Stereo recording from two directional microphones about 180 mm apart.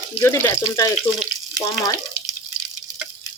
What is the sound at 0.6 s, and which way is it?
Speech, 20° left (ahead or behind).